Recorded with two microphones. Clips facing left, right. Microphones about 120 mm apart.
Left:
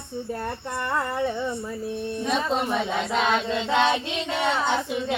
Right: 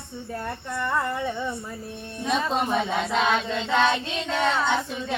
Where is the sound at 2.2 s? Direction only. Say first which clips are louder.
Right 1 dB; centre (ahead or behind).